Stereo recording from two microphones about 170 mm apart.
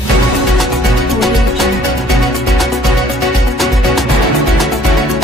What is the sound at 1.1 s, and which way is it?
Music, centre (ahead or behind).